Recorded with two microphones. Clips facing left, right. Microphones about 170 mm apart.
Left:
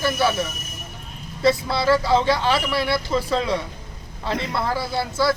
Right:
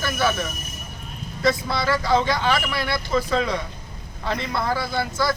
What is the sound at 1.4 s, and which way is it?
Speech, 30° left (ahead or behind).